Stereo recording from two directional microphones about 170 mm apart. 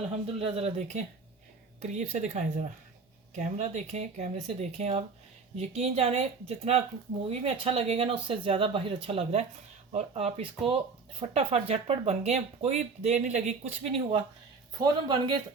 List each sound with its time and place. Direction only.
0.1 s speech: 35° right (ahead or behind)
15.0 s speech: 25° right (ahead or behind)